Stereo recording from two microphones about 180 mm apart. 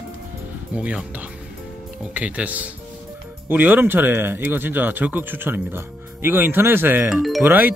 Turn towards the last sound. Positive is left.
turn(degrees=-10)  # may be behind; listen again after turning